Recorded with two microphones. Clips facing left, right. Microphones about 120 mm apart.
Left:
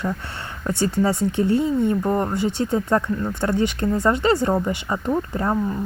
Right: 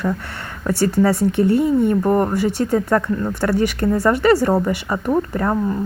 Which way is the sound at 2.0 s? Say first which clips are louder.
Right 5 dB; 15° right (ahead or behind).